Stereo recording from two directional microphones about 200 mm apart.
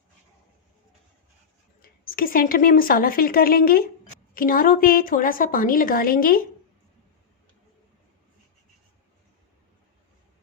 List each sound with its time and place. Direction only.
1.8 s a woman's voice: 45° left (ahead or behind)